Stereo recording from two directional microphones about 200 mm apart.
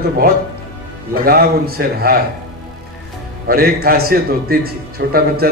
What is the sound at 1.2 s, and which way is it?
Speech, 50° right (ahead or behind).